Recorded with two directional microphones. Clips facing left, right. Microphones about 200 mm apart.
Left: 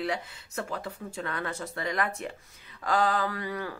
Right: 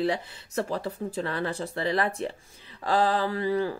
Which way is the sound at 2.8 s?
30° right (ahead or behind).